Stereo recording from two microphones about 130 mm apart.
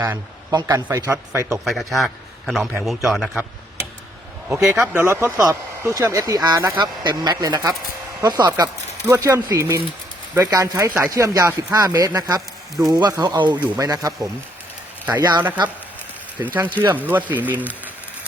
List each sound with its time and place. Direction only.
0.0 s speech: 25° right (ahead or behind)
1.6 s a man's voice: centre (ahead or behind)
4.4 s speech: 15° right (ahead or behind); by 15.4 s 30° right (ahead or behind)
16.4 s speech: 15° right (ahead or behind)